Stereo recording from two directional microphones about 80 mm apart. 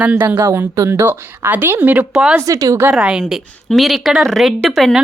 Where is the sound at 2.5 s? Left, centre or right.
Right.